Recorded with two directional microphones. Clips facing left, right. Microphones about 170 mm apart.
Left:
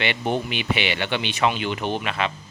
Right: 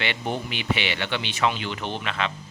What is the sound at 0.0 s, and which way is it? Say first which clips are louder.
Speech: left 4 dB; 20° left (ahead or behind).